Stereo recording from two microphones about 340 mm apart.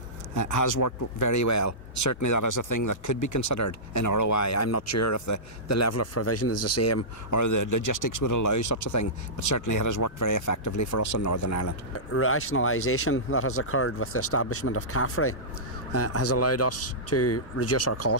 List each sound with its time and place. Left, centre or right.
0.3 s speech: left
12.1 s speech: left